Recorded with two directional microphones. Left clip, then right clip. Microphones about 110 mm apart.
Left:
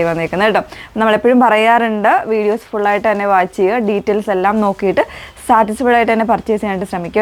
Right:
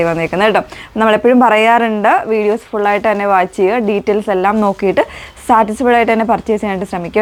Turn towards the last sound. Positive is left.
turn(degrees=-25)  # may be behind; listen again after turning